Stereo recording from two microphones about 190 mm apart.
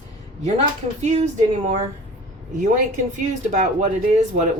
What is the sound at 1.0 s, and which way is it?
Speech, 40° right (ahead or behind).